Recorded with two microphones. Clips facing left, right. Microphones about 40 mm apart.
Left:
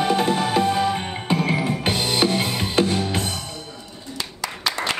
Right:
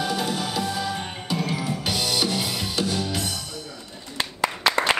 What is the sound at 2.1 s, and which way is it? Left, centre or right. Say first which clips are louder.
Music: left 4 dB; left.